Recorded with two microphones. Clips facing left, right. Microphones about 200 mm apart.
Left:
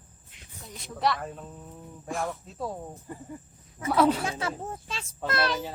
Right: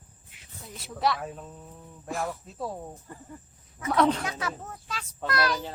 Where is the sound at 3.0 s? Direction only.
15° left (ahead or behind).